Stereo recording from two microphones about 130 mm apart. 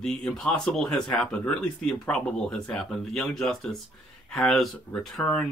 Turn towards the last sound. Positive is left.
turn(degrees=5)  # may be behind; listen again after turning